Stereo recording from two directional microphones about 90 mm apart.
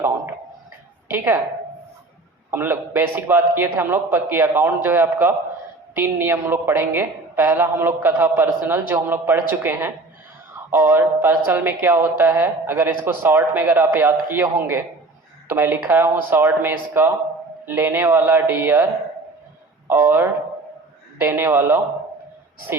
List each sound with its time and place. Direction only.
1.1 s speech: 25° right (ahead or behind)
2.5 s speech: 25° right (ahead or behind)
19.9 s speech: 25° right (ahead or behind)